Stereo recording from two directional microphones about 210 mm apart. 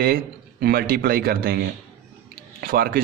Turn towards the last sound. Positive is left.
turn(degrees=-45)  # may be behind; listen again after turning